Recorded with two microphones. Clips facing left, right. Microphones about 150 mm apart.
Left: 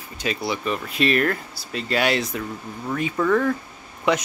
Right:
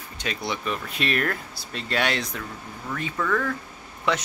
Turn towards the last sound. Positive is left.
turn(degrees=15)  # may be behind; listen again after turning